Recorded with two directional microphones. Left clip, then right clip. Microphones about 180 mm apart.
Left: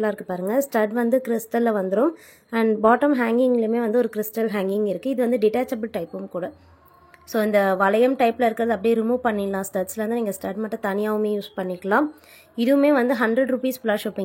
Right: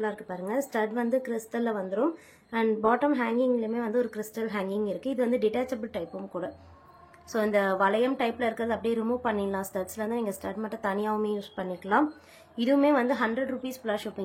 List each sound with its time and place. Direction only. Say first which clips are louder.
0.0 s a woman's voice: left 8 dB; 35° left (ahead or behind)